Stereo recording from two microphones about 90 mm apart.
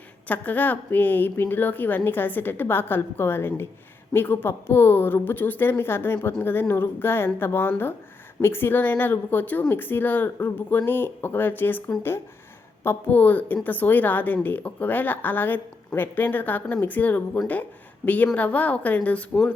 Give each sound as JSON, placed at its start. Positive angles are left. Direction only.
{"t": 0.3, "sound": "speech", "side_deg": 20}
{"t": 12.8, "sound": "a woman's voice", "side_deg": 25}